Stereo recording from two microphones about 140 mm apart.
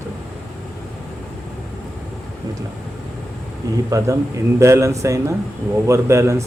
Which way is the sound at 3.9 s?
25° right (ahead or behind).